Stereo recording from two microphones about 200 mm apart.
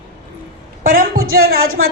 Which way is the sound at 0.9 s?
45° right (ahead or behind).